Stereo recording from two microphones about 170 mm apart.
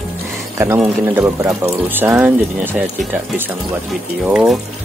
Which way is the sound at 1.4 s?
10° right (ahead or behind).